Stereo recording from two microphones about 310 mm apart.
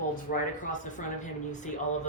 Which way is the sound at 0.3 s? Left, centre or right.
Left.